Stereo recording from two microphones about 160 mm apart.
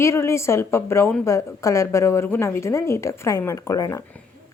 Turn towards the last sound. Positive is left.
turn(degrees=20)  # may be behind; listen again after turning